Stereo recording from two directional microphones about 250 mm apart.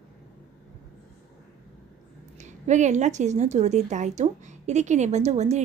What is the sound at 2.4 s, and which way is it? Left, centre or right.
Speech, right.